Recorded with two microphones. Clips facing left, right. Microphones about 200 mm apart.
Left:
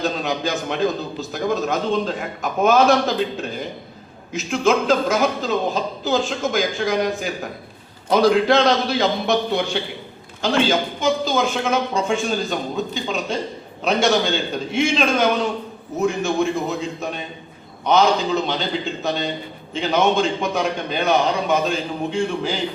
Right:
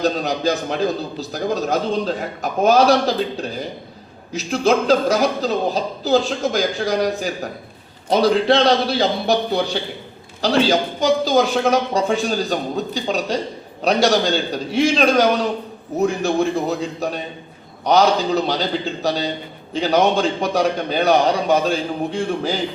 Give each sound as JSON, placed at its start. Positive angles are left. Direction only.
{"t": 0.0, "sound": "a man's voice", "side_deg": -40}